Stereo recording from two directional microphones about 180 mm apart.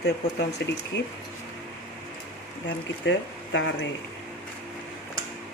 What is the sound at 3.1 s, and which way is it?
Speech, 90° left.